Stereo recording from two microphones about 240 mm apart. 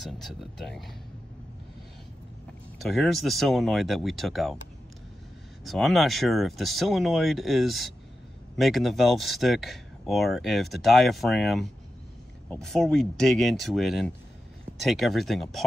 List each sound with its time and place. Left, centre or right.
0.0 s speech: centre
2.8 s speech: centre
5.6 s speech: centre